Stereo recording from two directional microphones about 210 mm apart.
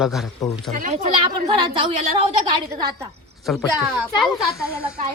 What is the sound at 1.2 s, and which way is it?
A woman's voice, 25° right (ahead or behind).